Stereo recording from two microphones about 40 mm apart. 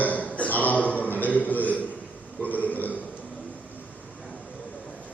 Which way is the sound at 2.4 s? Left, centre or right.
Left.